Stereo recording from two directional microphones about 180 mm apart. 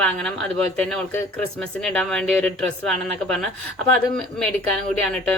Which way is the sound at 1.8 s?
5° left (ahead or behind).